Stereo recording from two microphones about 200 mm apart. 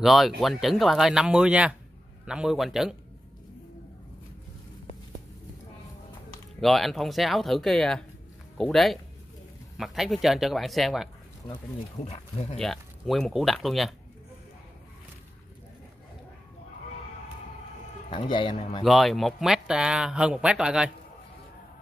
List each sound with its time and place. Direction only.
0.0 s speech: centre (ahead or behind)
6.6 s speech: centre (ahead or behind)
11.4 s speech: 30° left (ahead or behind)
12.5 s speech: centre (ahead or behind)
18.1 s speech: 25° left (ahead or behind)
18.9 s speech: centre (ahead or behind)